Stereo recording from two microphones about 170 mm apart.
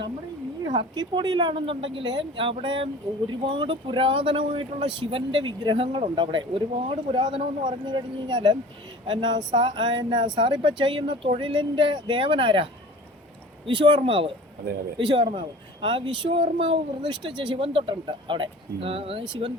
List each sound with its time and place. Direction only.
0.6 s speech: 25° right (ahead or behind)